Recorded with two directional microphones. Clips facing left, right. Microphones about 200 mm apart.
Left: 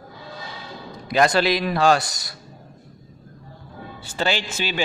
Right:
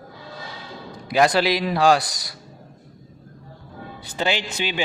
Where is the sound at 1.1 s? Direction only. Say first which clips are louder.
Even; 10° right (ahead or behind).